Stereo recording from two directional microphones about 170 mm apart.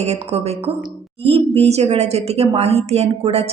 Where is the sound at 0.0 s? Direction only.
40° right (ahead or behind).